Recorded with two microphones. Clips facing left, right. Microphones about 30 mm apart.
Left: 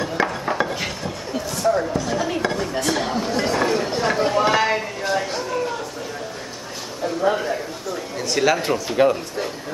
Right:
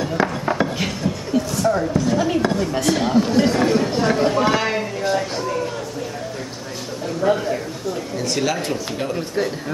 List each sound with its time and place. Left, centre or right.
0.0 s a sound: centre
7.2 s a man's voice: centre
8.4 s speech: centre
9.0 s speech: left